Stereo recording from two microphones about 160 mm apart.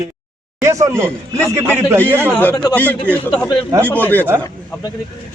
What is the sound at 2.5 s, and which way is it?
Speech, 25° left (ahead or behind).